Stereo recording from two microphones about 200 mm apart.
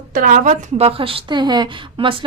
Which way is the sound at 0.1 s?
40° right (ahead or behind).